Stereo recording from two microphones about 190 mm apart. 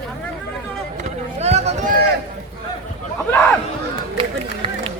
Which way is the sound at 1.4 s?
35° right (ahead or behind).